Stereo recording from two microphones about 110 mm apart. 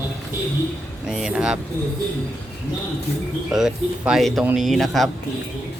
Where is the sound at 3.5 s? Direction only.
5° right (ahead or behind).